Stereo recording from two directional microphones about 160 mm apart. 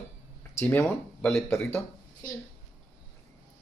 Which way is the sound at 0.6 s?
15° left (ahead or behind).